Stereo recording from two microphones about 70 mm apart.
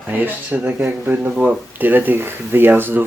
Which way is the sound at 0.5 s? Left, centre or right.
Right.